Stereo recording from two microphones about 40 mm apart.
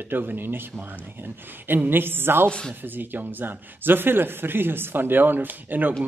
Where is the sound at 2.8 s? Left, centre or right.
Right.